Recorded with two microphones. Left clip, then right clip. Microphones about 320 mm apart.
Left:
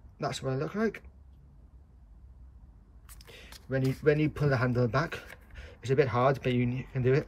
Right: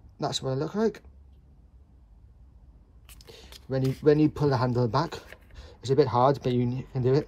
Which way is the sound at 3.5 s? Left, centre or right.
Centre.